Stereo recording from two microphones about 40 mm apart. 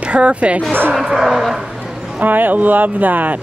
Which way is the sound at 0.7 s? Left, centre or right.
Right.